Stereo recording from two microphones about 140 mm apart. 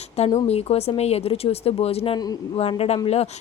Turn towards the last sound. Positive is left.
turn(degrees=50)  # may be behind; listen again after turning